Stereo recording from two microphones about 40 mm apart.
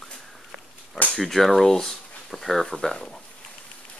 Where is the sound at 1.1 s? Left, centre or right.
Centre.